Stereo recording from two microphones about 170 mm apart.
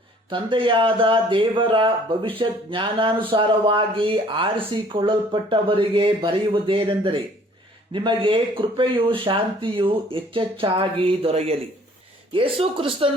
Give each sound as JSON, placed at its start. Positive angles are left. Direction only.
{"t": 0.3, "sound": "speech", "side_deg": -30}